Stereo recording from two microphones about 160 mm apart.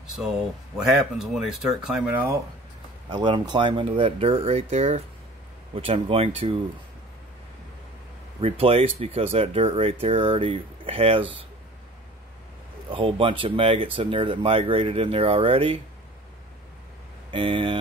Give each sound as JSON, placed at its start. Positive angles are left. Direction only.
{"t": 1.1, "sound": "speech", "side_deg": -5}
{"t": 3.1, "sound": "speech", "side_deg": -30}
{"t": 8.4, "sound": "speech", "side_deg": -35}
{"t": 12.9, "sound": "speech", "side_deg": -35}
{"t": 17.3, "sound": "speech", "side_deg": -35}